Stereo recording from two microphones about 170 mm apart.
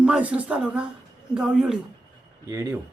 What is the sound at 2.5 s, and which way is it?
Speech, 20° right (ahead or behind).